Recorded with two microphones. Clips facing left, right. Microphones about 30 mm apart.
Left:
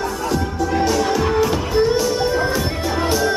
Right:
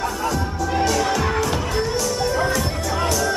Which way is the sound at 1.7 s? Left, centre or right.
Left.